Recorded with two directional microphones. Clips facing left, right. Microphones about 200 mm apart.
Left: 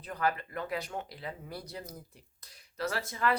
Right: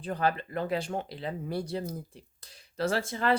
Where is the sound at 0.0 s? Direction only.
30° right (ahead or behind).